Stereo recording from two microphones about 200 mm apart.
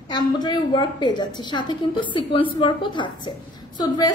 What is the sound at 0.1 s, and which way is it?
A woman's voice, 20° left (ahead or behind).